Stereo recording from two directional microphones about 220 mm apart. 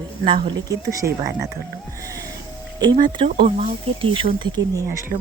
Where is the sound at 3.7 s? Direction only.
25° right (ahead or behind).